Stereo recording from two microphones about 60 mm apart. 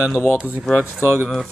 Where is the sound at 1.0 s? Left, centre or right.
Right.